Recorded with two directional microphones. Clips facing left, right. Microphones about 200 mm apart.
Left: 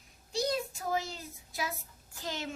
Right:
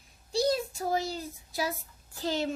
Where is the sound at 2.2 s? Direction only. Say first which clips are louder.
Right 8 dB; 30° right (ahead or behind).